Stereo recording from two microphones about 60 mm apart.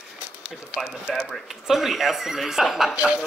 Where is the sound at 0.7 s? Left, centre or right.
Centre.